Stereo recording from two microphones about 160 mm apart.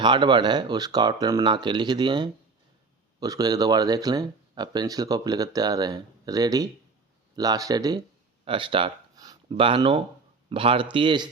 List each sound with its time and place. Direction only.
0.0 s speech: 30° right (ahead or behind)
8.4 s a sound: 30° right (ahead or behind)
9.5 s speech: 35° right (ahead or behind)